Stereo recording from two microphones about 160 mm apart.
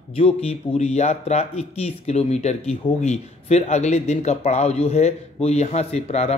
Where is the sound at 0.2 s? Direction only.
40° left (ahead or behind).